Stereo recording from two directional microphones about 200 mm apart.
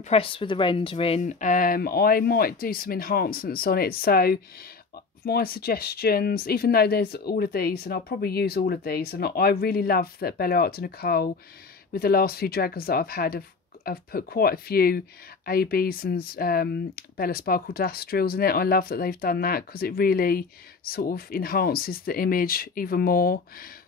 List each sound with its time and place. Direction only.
0.0 s speech: 30° left (ahead or behind); by 23.7 s 45° left (ahead or behind)